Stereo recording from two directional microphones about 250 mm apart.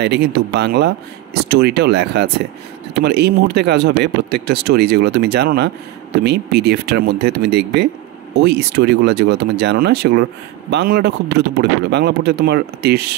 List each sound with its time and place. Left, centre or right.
0.0 s speech: right